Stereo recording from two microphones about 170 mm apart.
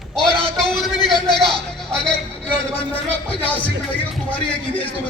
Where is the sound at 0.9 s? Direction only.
25° left (ahead or behind).